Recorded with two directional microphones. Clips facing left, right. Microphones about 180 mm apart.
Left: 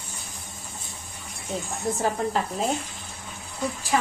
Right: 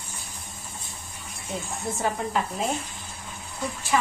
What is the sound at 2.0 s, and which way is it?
Speech, 35° left (ahead or behind).